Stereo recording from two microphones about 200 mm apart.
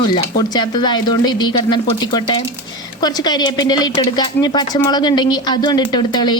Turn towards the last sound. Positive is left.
turn(degrees=20)  # may be behind; listen again after turning